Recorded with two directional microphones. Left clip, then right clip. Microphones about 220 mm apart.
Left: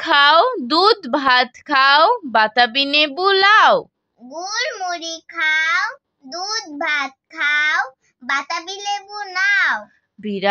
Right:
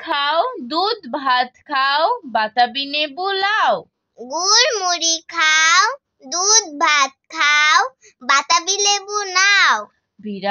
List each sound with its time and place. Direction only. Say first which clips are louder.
0.0 s a woman's voice: left 6 dB; 35° left (ahead or behind)
4.2 s a child's voice: right 8 dB; 50° right (ahead or behind)
10.2 s speech: left 4 dB; 30° left (ahead or behind)